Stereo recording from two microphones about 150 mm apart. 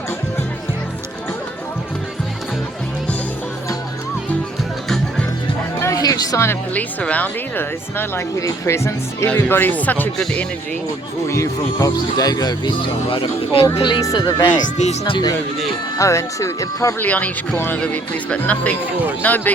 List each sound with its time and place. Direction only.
5.8 s speech: 25° left (ahead or behind); by 10.4 s 5° left (ahead or behind)
11.3 s speech: 20° left (ahead or behind)
14.5 s speech: 50° left (ahead or behind)
15.0 s a man's voice: 30° left (ahead or behind)
16.0 s speech: 20° left (ahead or behind)
17.1 s speech: 10° left (ahead or behind)